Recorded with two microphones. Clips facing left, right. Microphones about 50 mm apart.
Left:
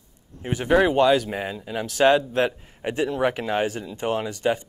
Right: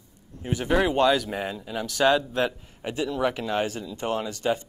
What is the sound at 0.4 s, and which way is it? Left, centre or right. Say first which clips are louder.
Speech: left 4 dB; centre.